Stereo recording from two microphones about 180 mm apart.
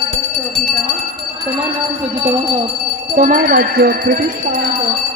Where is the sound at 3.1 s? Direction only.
50° right (ahead or behind).